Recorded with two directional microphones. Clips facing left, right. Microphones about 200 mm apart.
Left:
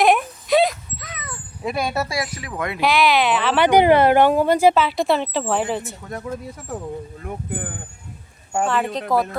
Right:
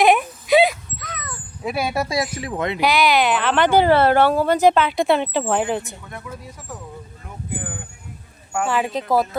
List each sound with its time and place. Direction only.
0.0 s a sound: centre (ahead or behind)
1.1 s cat: centre (ahead or behind); by 2.2 s 15° right (ahead or behind)
2.3 s speech: 25° right (ahead or behind)
2.8 s speech: centre (ahead or behind)
6.1 s speech: 40° left (ahead or behind)
8.6 s speech: 5° right (ahead or behind)